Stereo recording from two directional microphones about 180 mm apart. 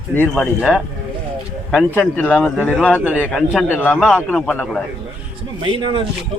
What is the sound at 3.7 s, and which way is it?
Speech, 10° left (ahead or behind).